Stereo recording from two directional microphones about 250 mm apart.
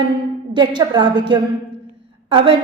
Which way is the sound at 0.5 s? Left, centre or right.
Centre.